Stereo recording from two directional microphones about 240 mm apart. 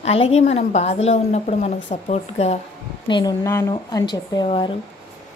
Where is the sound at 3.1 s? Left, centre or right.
Centre.